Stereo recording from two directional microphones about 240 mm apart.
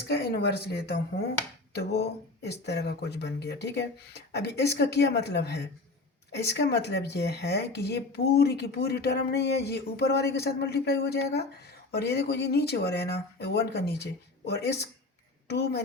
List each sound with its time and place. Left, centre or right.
0.1 s speech: left